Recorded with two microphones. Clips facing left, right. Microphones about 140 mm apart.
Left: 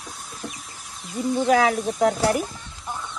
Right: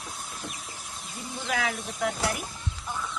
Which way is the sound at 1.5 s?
40° left (ahead or behind).